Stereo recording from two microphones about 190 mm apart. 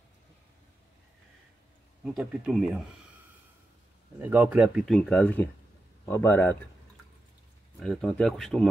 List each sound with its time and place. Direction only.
2.0 s speech: centre (ahead or behind)
4.2 s a man's voice: 10° right (ahead or behind); by 6.5 s 10° left (ahead or behind)
7.8 s speech: 5° left (ahead or behind)